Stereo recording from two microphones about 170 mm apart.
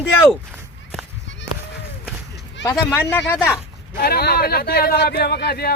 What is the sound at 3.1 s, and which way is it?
Speech, 15° left (ahead or behind).